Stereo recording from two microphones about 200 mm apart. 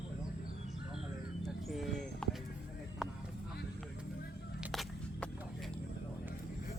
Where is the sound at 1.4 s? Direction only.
Centre (ahead or behind).